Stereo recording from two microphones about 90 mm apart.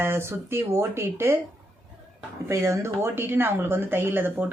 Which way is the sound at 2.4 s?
30° right (ahead or behind).